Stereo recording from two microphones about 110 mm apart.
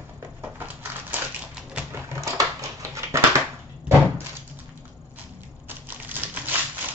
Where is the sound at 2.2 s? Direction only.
30° right (ahead or behind).